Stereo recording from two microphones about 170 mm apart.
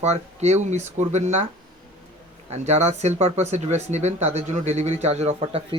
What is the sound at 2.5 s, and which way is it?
Speech, 40° right (ahead or behind).